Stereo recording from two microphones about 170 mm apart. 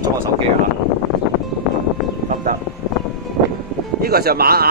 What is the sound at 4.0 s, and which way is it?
Speech, 65° right (ahead or behind).